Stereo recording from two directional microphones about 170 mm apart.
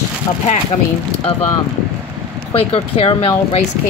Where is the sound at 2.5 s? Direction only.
35° left (ahead or behind).